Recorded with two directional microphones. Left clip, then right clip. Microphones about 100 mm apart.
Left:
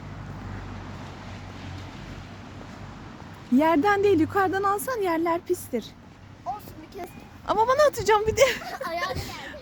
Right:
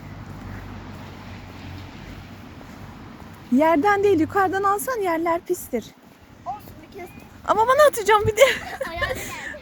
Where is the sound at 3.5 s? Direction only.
Centre (ahead or behind).